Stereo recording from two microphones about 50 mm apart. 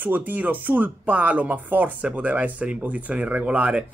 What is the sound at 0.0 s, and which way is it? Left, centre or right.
Speech, right.